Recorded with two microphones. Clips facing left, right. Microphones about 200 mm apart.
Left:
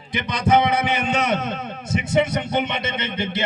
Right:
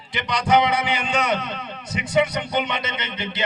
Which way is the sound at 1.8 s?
25° left (ahead or behind).